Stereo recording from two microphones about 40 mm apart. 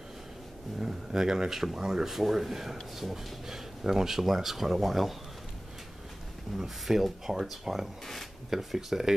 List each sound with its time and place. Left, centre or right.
0.7 s a sound: centre
1.5 s speech: centre
6.6 s speech: centre